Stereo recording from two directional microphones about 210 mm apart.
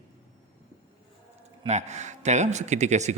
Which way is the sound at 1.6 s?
35° right (ahead or behind).